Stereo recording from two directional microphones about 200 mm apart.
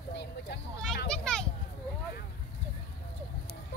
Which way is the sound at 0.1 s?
55° left (ahead or behind).